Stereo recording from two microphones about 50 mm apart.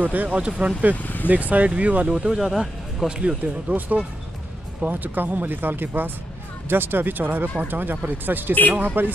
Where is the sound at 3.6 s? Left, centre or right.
Right.